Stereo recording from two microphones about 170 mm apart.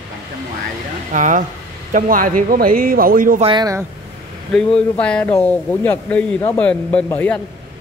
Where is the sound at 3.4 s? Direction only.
25° right (ahead or behind).